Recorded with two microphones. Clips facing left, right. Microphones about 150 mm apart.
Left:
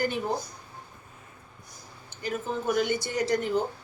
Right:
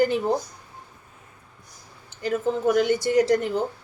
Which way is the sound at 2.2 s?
90° right.